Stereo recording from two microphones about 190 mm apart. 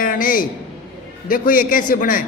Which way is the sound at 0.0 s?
45° left (ahead or behind).